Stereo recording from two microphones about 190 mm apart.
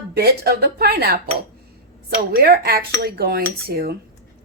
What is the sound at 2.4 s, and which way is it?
Speech, 55° right (ahead or behind).